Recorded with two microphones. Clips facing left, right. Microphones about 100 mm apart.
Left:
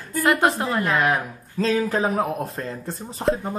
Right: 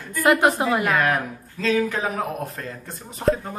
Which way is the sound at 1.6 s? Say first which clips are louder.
Left 1 dB; 35° left (ahead or behind).